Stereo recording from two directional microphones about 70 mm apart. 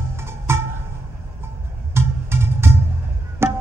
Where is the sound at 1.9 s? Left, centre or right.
Right.